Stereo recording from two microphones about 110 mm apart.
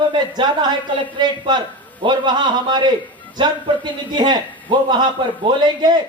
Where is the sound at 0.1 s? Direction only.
40° right (ahead or behind).